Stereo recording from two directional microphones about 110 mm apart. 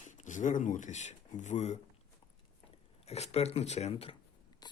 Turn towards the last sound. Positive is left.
turn(degrees=40)  # may be behind; listen again after turning